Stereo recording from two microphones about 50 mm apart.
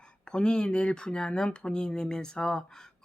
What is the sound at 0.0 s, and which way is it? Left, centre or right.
Speech, centre.